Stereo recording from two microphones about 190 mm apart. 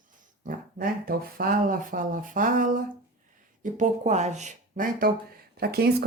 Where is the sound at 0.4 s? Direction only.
50° right (ahead or behind).